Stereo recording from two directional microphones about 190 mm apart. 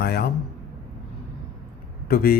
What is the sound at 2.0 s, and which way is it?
Speech, 50° left (ahead or behind).